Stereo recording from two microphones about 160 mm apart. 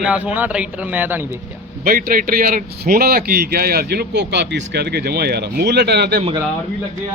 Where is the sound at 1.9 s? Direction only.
60° right (ahead or behind); by 6.2 s 90° right.